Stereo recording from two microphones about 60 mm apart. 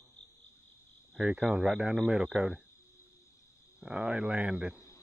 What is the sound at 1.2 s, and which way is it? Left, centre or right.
Speech, centre.